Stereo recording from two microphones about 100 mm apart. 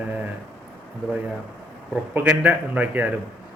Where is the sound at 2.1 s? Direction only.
15° right (ahead or behind).